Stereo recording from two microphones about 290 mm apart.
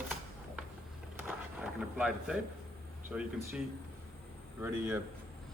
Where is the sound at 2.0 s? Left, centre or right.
Centre.